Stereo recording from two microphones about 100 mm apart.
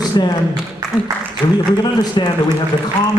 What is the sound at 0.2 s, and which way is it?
Speech, 45° left (ahead or behind).